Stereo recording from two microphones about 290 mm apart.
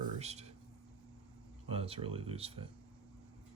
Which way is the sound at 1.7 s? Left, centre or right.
Centre.